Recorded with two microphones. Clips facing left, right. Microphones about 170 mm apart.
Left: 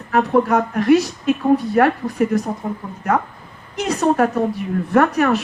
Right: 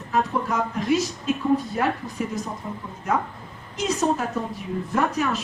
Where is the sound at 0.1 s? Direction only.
65° left (ahead or behind).